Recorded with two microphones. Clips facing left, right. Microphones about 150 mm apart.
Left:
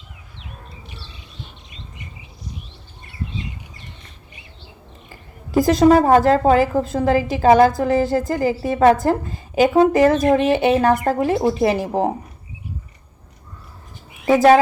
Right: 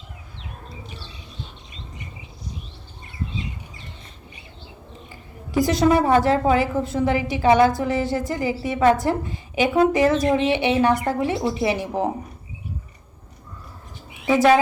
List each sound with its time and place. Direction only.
5.5 s a woman's voice: 45° left (ahead or behind)
14.3 s a woman's voice: 40° left (ahead or behind)